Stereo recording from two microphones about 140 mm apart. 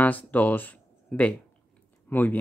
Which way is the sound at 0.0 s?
10° left (ahead or behind).